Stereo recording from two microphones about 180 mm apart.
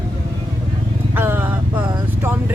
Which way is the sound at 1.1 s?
10° right (ahead or behind).